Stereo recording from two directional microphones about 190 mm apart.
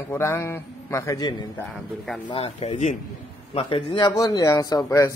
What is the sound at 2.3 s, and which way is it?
Speech, 30° left (ahead or behind).